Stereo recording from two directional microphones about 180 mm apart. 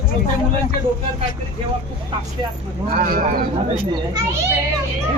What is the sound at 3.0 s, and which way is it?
Speech, 50° right (ahead or behind).